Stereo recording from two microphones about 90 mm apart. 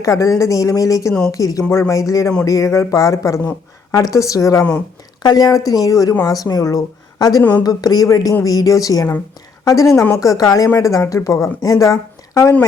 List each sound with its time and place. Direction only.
0.0 s a woman's voice: 40° left (ahead or behind)